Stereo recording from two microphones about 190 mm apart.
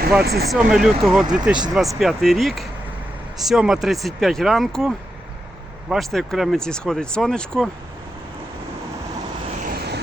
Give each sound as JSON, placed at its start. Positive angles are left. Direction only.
{"t": 0.2, "sound": "speech", "side_deg": -55}
{"t": 0.5, "sound": "speech", "side_deg": 0}
{"t": 9.6, "sound": "vehicle", "side_deg": -60}